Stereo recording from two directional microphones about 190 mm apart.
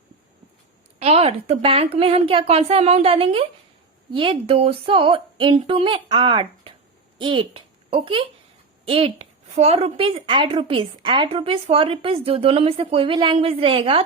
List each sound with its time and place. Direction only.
0.9 s a woman's voice: 35° right (ahead or behind)